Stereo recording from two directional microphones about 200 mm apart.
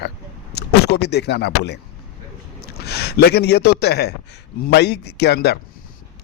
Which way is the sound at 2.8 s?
55° left (ahead or behind).